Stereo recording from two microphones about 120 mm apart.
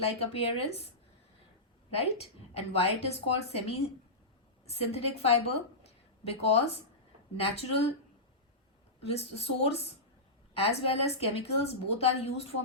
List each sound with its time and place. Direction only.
0.0 s a woman's voice: 55° left (ahead or behind)
2.0 s a woman's voice: 60° left (ahead or behind)
9.0 s a woman's voice: 55° left (ahead or behind)